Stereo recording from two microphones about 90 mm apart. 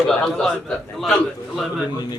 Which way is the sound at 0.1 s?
5° left (ahead or behind).